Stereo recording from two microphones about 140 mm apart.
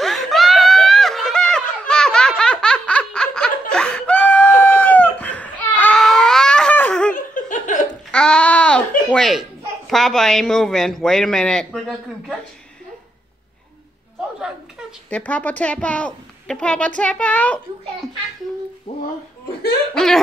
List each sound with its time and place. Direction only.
0.0 s a sound: centre (ahead or behind)
7.2 s laughter: 70° left (ahead or behind)
8.1 s a sound: 5° left (ahead or behind)
9.8 s a woman's voice: centre (ahead or behind)
15.0 s a woman's voice: 10° left (ahead or behind)
19.9 s a woman's voice: 5° left (ahead or behind)